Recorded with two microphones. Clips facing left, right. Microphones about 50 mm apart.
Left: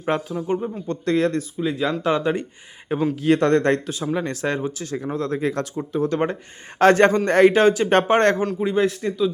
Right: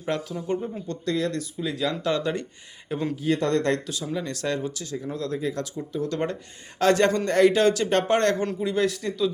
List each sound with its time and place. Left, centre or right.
0.3 s speech: centre
0.9 s speech: left
3.2 s speech: left
4.4 s speech: left
5.4 s speech: left
6.0 s speech: left